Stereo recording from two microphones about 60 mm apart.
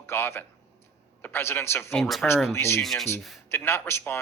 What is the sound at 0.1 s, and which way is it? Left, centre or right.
A man's voice, left.